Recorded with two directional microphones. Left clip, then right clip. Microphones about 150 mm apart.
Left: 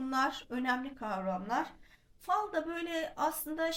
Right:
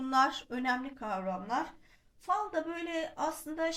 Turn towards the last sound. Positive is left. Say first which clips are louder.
# even
turn(degrees=10)  # may be behind; listen again after turning